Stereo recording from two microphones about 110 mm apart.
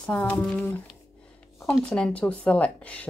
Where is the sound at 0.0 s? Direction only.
15° left (ahead or behind).